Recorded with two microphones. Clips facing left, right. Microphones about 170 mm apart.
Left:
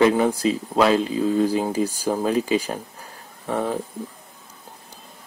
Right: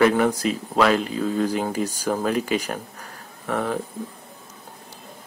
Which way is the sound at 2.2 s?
25° left (ahead or behind).